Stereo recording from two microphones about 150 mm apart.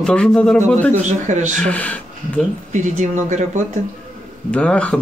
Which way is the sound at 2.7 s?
55° right (ahead or behind).